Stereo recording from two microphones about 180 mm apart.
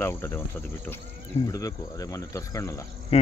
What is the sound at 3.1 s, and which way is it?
Speech, 35° left (ahead or behind).